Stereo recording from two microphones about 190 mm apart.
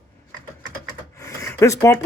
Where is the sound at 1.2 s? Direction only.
15° left (ahead or behind).